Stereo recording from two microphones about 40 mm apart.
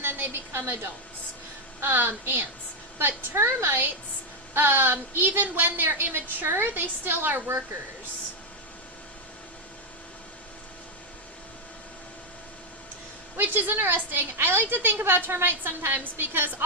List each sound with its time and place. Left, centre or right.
0.0 s a sound: right
1.8 s a woman's voice: right
4.5 s a woman's voice: right
13.4 s a woman's voice: right
15.3 s a woman's voice: right